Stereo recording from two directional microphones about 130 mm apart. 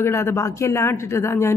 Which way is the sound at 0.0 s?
20° left (ahead or behind).